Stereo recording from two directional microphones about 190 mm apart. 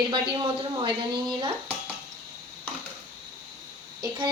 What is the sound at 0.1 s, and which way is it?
Speech, 25° right (ahead or behind).